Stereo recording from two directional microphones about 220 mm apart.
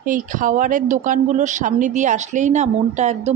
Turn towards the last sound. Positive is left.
turn(degrees=-30)  # may be behind; listen again after turning